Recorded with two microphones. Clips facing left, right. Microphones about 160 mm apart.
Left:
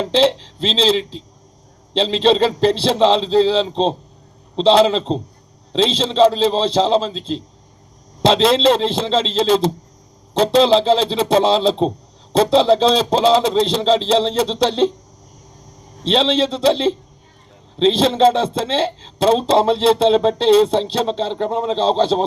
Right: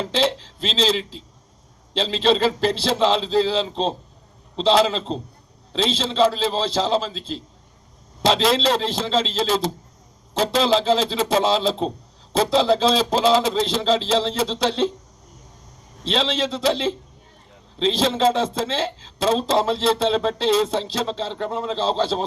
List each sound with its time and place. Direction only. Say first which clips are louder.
0.0 s a man's voice: left 6 dB; 30° left (ahead or behind)
16.0 s a man's voice: left 6 dB; 25° left (ahead or behind)